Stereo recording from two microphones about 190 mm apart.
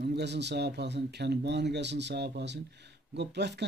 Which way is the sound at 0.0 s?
65° right (ahead or behind).